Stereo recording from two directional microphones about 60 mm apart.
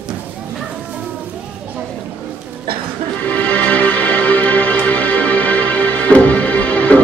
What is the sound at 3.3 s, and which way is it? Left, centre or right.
Music, left.